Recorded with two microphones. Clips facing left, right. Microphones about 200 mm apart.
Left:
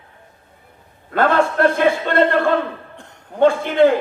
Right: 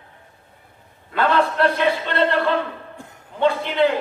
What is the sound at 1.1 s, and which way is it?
A man's voice, 45° left (ahead or behind).